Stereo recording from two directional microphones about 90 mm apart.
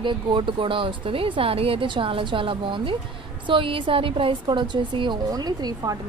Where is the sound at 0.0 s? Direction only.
65° right (ahead or behind).